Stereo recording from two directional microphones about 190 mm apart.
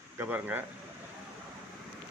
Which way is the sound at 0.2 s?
10° right (ahead or behind).